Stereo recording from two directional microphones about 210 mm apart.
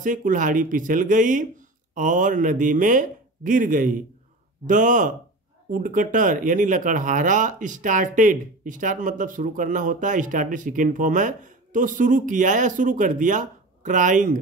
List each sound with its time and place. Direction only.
0.0 s speech: 40° right (ahead or behind)